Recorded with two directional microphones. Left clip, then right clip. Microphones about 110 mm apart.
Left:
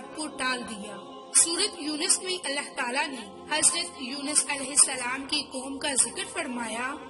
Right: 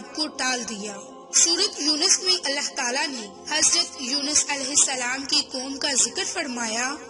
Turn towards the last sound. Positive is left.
turn(degrees=-50)  # may be behind; listen again after turning